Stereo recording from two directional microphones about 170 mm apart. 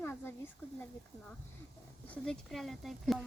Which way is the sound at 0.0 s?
10° left (ahead or behind).